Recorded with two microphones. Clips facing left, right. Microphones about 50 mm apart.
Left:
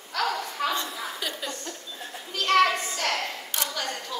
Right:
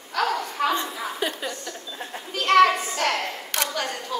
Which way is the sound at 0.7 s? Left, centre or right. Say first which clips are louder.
Right 4 dB; right.